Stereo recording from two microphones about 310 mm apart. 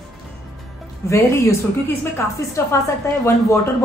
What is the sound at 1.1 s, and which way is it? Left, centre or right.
Speech, centre.